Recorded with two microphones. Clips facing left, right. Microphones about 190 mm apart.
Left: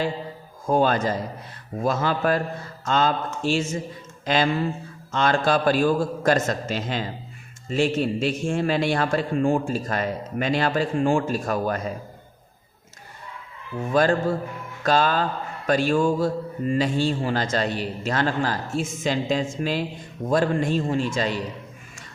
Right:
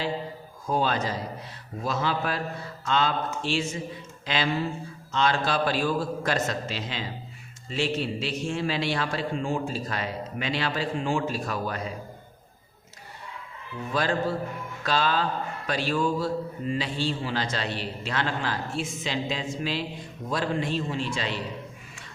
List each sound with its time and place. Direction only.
0.7 s mantra: 50° left (ahead or behind)
13.7 s mantra: 50° left (ahead or behind)